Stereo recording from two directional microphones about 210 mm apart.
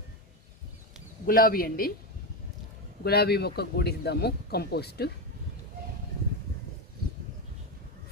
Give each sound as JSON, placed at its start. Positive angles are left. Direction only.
{"t": 1.3, "sound": "speech", "side_deg": 45}
{"t": 3.0, "sound": "speech", "side_deg": 50}